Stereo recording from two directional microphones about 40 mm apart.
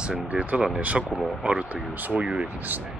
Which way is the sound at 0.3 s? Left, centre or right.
Right.